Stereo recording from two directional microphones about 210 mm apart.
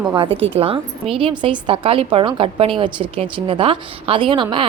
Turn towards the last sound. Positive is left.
turn(degrees=-25)  # may be behind; listen again after turning